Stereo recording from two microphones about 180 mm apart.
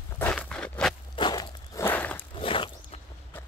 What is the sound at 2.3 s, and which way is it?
Walk, 30° left (ahead or behind).